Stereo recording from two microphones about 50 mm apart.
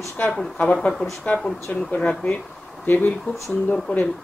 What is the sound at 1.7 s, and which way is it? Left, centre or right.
Speech, left.